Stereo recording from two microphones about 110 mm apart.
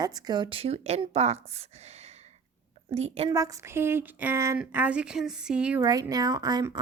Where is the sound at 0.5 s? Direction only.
70° right (ahead or behind).